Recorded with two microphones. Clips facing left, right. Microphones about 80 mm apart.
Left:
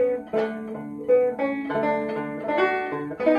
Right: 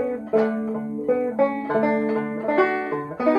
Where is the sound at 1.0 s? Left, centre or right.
Centre.